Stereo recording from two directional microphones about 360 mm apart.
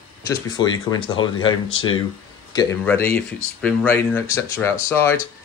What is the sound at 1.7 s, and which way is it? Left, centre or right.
Speech, left.